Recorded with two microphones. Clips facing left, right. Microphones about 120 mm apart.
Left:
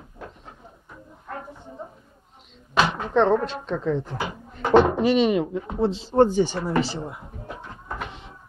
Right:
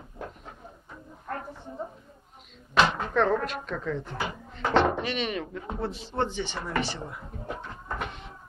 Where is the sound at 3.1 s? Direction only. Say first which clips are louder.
Left 5 dB; 30° left (ahead or behind).